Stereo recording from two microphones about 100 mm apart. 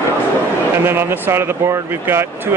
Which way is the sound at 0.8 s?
20° right (ahead or behind).